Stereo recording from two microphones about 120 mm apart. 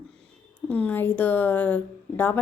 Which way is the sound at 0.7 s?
10° left (ahead or behind).